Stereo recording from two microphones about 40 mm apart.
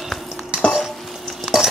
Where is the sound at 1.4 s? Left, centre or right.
Centre.